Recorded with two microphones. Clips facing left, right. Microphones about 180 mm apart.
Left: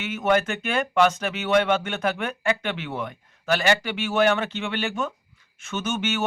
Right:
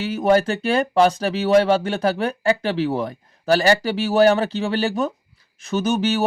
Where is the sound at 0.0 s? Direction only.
35° right (ahead or behind).